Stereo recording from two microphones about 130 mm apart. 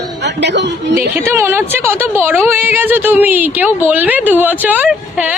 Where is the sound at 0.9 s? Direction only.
20° right (ahead or behind).